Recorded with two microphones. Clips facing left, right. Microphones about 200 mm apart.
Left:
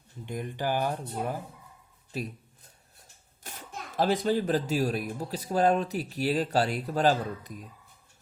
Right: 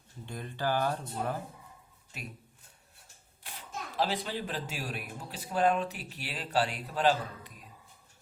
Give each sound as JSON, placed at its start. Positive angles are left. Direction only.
{"t": 0.3, "sound": "speech", "side_deg": 15}
{"t": 2.1, "sound": "speech", "side_deg": 35}
{"t": 3.4, "sound": "speech", "side_deg": 45}